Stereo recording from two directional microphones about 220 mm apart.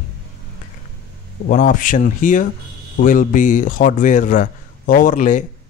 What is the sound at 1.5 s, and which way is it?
Speech, 35° left (ahead or behind).